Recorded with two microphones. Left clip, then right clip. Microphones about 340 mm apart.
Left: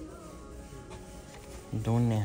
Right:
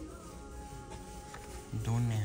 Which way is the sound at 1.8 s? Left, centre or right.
Centre.